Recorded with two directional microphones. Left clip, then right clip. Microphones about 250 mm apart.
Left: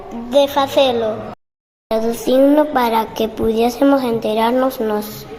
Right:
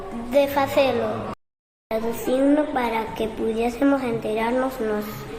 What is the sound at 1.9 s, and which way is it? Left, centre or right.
A woman's voice, left.